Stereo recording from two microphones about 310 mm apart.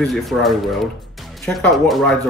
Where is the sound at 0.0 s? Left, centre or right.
Centre.